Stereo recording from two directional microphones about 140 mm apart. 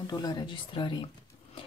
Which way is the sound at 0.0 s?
30° left (ahead or behind).